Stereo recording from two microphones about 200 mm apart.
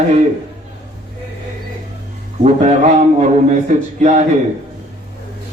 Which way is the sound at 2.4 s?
35° right (ahead or behind).